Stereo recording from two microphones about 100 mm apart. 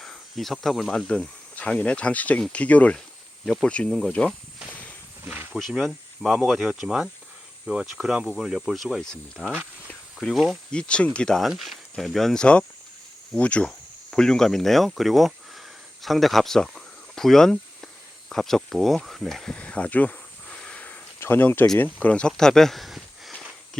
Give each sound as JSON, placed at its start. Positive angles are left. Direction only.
{"t": 0.0, "sound": "speech", "side_deg": 5}
{"t": 4.7, "sound": "walk", "side_deg": 15}
{"t": 5.2, "sound": "snake", "side_deg": -20}
{"t": 5.5, "sound": "speech", "side_deg": 0}
{"t": 9.8, "sound": "a sound", "side_deg": 10}
{"t": 10.7, "sound": "speech", "side_deg": 10}
{"t": 22.0, "sound": "a sound", "side_deg": 10}